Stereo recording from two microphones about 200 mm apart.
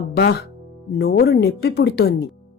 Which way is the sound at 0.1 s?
55° left (ahead or behind).